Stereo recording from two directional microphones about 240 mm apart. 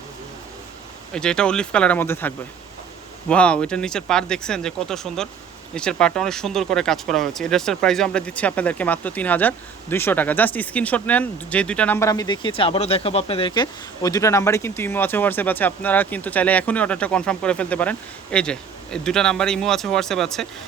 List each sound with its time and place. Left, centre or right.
1.1 s speech: centre